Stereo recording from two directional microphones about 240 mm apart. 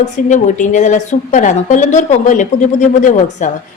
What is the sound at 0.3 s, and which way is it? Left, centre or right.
A woman's voice, left.